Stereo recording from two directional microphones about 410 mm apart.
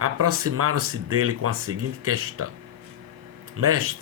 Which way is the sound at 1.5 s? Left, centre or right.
Right.